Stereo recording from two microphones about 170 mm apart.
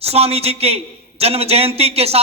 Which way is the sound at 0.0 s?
35° right (ahead or behind).